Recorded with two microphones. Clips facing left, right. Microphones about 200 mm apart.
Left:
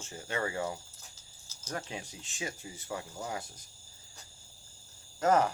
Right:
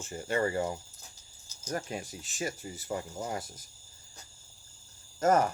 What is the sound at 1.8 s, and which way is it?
Speech, 45° right (ahead or behind).